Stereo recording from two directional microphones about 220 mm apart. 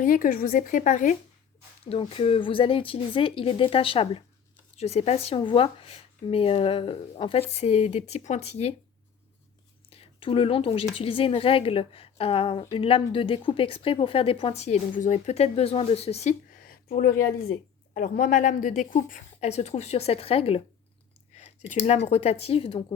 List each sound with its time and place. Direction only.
0.0 s speech: 35° left (ahead or behind)
1.9 s a woman's voice: 25° left (ahead or behind)
9.9 s a woman's voice: 25° left (ahead or behind)
16.6 s speech: 40° left (ahead or behind); by 20.6 s 25° left (ahead or behind)
21.8 s a woman's voice: 30° left (ahead or behind)